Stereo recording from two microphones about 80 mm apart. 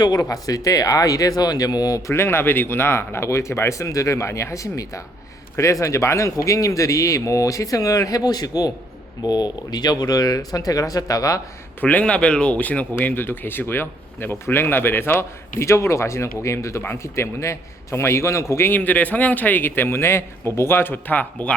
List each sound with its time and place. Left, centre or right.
0.0 s speech: left
2.1 s speech: left
11.8 s a man's voice: centre